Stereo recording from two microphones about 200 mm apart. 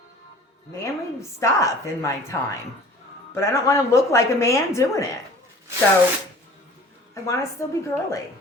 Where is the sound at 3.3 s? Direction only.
15° left (ahead or behind).